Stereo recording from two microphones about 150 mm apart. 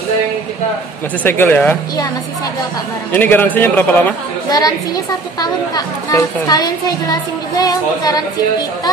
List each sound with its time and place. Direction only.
1.2 s a man's voice: 15° left (ahead or behind)
3.1 s a man's voice: 15° left (ahead or behind)
4.5 s speech: 25° left (ahead or behind)